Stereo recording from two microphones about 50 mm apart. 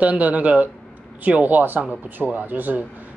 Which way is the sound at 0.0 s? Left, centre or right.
Right.